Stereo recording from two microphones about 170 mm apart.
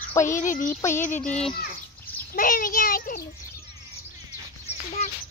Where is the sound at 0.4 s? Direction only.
50° left (ahead or behind).